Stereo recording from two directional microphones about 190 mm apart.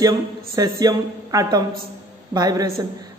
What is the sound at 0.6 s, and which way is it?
A woman's voice, 20° right (ahead or behind).